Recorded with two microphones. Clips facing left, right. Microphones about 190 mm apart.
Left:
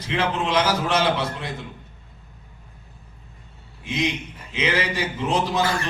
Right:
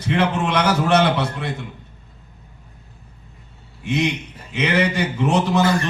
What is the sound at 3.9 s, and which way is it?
Speech, 65° right (ahead or behind).